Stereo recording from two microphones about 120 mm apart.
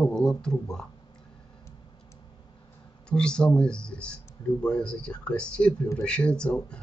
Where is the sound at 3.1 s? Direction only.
5° left (ahead or behind).